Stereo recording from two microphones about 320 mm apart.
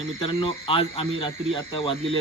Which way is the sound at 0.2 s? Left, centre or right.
Centre.